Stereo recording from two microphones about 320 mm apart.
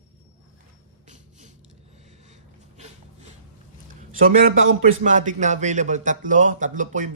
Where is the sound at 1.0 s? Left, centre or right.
Right.